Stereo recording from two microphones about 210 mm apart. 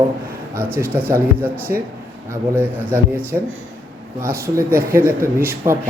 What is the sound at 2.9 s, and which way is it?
Speech, 10° right (ahead or behind).